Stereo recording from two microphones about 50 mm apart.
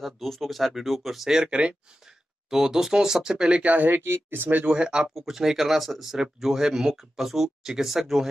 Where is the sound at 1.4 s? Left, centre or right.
Right.